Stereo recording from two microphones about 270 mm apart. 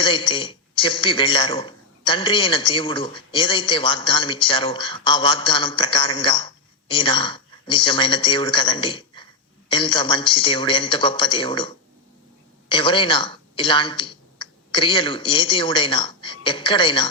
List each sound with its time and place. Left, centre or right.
0.0 s a man's voice: centre